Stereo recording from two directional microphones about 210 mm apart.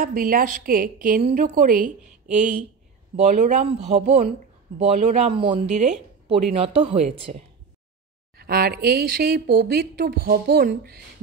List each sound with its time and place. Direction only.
0.0 s a woman's voice: 40° right (ahead or behind)
8.4 s speech: 50° right (ahead or behind)